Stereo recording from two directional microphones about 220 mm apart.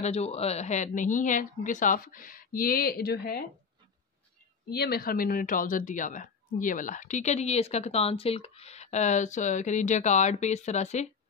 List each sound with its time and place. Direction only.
0.0 s speech: 30° left (ahead or behind); by 3.4 s 45° left (ahead or behind)
4.6 s speech: 45° left (ahead or behind)